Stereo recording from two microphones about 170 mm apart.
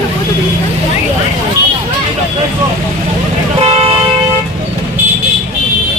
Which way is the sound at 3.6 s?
35° right (ahead or behind).